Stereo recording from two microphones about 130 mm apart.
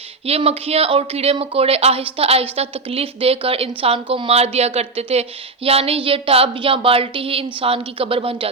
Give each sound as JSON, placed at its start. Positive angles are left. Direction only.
{"t": 0.3, "sound": "speech", "side_deg": -50}